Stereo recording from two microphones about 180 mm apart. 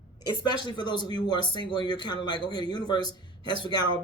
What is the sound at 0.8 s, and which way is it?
Speech, 25° left (ahead or behind).